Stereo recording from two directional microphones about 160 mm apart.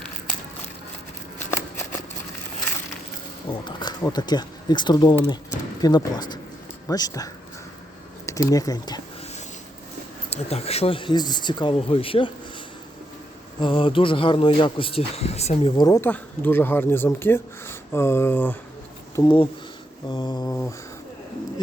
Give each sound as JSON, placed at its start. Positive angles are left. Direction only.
{"t": 1.4, "sound": "a sound", "side_deg": 15}
{"t": 3.6, "sound": "speech", "side_deg": 30}
{"t": 8.3, "sound": "speech", "side_deg": 20}
{"t": 10.2, "sound": "speech", "side_deg": 40}
{"t": 13.6, "sound": "speech", "side_deg": 30}
{"t": 15.7, "sound": "speech", "side_deg": 20}
{"t": 19.1, "sound": "speech", "side_deg": 30}
{"t": 20.1, "sound": "mantra", "side_deg": 30}